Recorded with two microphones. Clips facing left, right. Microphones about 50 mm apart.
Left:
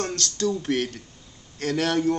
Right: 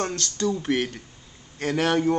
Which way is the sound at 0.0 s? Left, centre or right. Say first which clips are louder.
Even; centre.